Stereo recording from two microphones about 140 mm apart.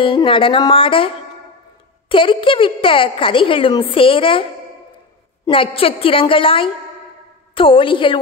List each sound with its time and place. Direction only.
0.0 s a woman's voice: 40° left (ahead or behind)
5.5 s a woman's voice: 40° left (ahead or behind)